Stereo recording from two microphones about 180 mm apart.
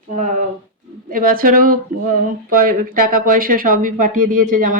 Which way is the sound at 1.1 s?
50° right (ahead or behind).